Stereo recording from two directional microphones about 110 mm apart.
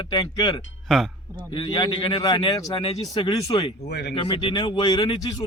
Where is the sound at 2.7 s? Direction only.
50° left (ahead or behind).